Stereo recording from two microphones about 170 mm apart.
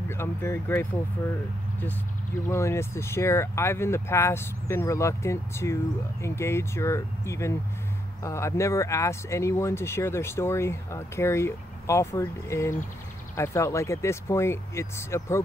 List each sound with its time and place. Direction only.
0.1 s speech: 15° left (ahead or behind)
2.4 s speech: 15° left (ahead or behind)